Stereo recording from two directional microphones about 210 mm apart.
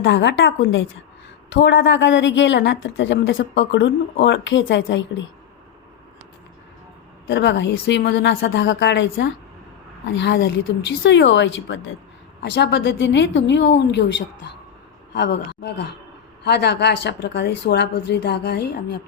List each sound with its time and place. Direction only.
0.0 s a woman's voice: 55° left (ahead or behind)
7.3 s a woman's voice: 60° left (ahead or behind)